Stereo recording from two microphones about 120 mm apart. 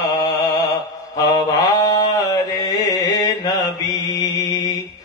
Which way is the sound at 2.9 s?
30° left (ahead or behind).